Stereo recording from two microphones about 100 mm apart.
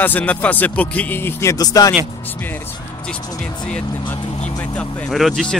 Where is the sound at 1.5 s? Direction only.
40° left (ahead or behind).